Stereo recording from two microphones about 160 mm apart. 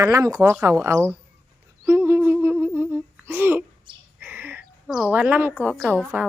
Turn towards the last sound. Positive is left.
turn(degrees=-10)  # may be behind; listen again after turning